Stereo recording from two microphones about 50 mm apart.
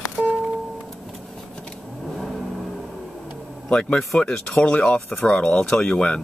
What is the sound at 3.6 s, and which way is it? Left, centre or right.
A man's voice, centre.